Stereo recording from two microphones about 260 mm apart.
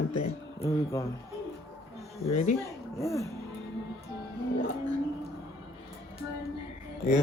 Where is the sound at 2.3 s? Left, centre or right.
Left.